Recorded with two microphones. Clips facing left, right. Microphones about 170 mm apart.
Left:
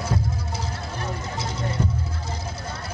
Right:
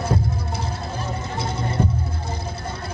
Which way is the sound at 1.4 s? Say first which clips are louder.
Right 4 dB; 55° right (ahead or behind).